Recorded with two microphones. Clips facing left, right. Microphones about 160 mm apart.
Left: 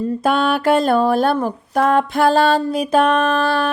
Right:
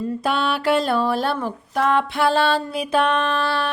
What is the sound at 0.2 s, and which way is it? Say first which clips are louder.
Music: left 6 dB; 50° left (ahead or behind).